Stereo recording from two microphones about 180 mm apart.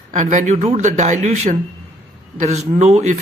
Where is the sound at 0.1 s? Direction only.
45° right (ahead or behind).